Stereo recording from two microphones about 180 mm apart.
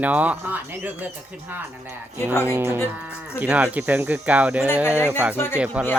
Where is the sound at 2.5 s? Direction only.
15° right (ahead or behind).